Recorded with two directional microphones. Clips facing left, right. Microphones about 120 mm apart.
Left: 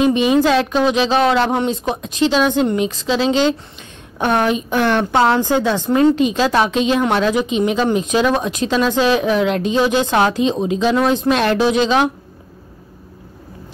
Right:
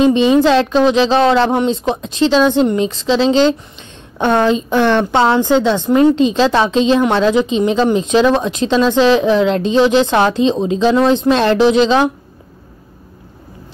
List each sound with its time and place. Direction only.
0.0 s a woman's voice: 30° right (ahead or behind)